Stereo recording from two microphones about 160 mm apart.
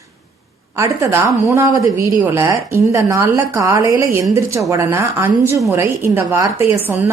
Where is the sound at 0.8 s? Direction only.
15° right (ahead or behind).